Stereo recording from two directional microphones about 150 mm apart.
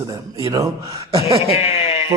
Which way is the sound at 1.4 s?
45° left (ahead or behind).